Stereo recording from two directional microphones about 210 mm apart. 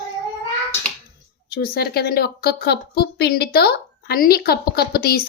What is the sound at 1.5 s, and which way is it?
A woman's voice, 45° left (ahead or behind).